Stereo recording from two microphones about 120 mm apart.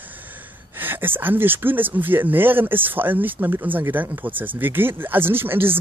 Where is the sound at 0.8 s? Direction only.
15° right (ahead or behind).